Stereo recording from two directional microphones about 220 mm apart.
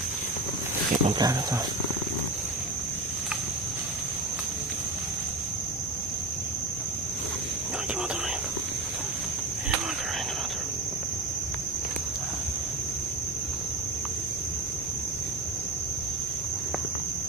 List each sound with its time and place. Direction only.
1.0 s speech: 20° right (ahead or behind)